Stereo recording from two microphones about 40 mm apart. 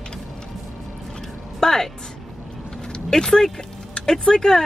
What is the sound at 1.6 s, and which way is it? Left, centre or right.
Speech, centre.